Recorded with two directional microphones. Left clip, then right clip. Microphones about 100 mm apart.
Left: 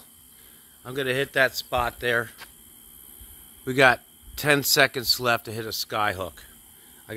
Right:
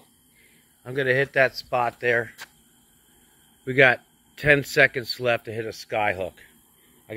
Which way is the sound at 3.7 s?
40° left (ahead or behind).